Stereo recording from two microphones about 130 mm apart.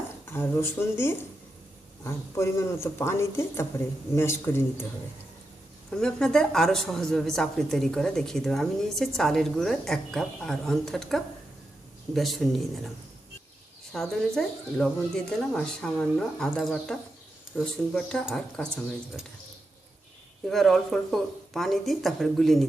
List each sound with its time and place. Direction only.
0.3 s speech: 20° left (ahead or behind)
5.9 s a woman's voice: 5° left (ahead or behind)
13.9 s a woman's voice: centre (ahead or behind)
20.5 s a woman's voice: centre (ahead or behind)